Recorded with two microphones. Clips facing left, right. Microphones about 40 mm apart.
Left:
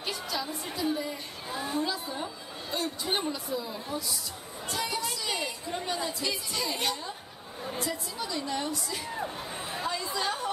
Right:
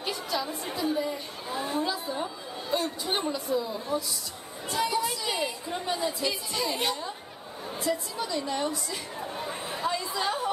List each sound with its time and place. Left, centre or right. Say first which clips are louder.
0.0 s music: right 3 dB; centre
0.8 s a sound: right 3 dB; centre
4.6 s a woman's voice: right 5 dB; centre
9.4 s chatter: right 3 dB; centre